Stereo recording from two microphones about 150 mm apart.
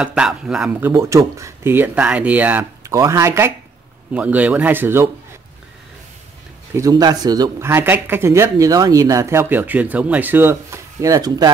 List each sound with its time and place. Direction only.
0.0 s speech: 5° right (ahead or behind)
6.8 s speech: 25° right (ahead or behind)